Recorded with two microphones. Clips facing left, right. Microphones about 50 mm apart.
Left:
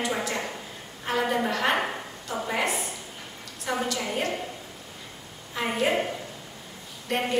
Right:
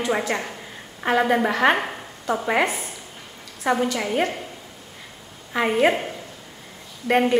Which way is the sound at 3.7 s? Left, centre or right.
Right.